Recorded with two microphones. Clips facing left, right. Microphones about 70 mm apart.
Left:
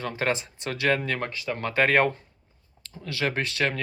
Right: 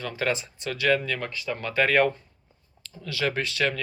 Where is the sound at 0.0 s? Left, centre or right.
Left.